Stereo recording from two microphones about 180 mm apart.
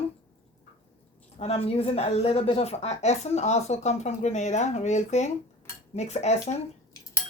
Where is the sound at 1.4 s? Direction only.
35° left (ahead or behind).